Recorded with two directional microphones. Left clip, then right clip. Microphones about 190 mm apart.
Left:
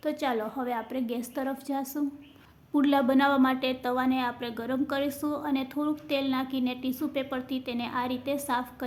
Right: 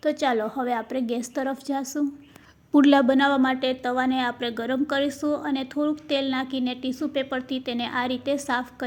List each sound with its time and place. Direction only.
0.0 s a woman's voice: 25° right (ahead or behind)